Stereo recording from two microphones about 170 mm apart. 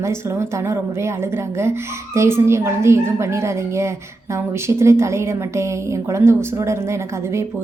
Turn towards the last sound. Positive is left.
turn(degrees=-15)  # may be behind; listen again after turning